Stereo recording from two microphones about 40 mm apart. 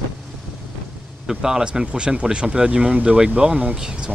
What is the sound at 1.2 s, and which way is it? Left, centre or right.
Speech, centre.